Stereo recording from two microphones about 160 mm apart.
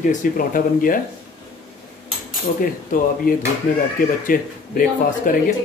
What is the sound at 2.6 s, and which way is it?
Speech, 60° left (ahead or behind).